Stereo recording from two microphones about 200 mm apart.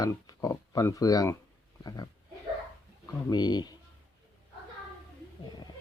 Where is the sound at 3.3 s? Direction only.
20° left (ahead or behind).